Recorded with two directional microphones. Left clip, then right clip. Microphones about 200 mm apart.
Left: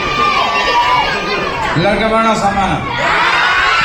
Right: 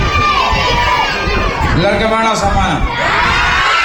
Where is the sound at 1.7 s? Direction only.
45° right (ahead or behind).